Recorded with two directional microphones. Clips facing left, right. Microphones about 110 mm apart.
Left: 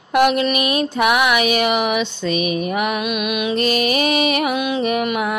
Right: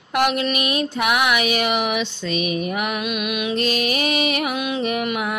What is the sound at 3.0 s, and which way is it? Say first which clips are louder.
Music: left 3 dB; 15° left (ahead or behind).